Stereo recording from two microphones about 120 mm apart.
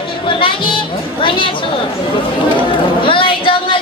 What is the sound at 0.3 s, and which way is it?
Speech, 45° left (ahead or behind).